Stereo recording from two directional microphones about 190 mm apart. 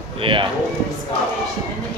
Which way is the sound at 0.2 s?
25° right (ahead or behind).